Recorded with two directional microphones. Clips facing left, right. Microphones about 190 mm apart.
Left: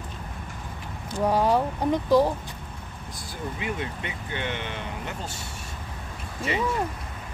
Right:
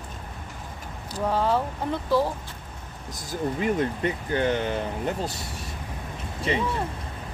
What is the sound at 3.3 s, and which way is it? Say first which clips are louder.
Speech: right 7 dB; 45° right (ahead or behind).